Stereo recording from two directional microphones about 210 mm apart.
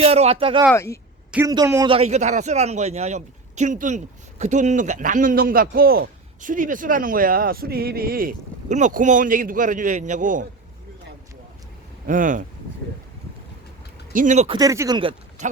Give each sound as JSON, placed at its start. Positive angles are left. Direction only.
{"t": 0.0, "sound": "speech", "side_deg": -30}
{"t": 0.7, "sound": "speech", "side_deg": 15}
{"t": 1.5, "sound": "a man's voice", "side_deg": -15}
{"t": 1.9, "sound": "a man's voice", "side_deg": -30}
{"t": 12.0, "sound": "a man's voice", "side_deg": -40}
{"t": 14.1, "sound": "a man's voice", "side_deg": -40}